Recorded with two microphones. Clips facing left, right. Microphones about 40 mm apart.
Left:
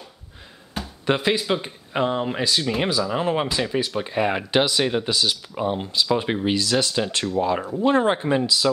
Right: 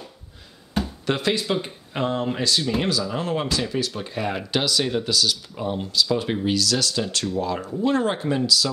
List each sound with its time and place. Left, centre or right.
1.0 s speech: centre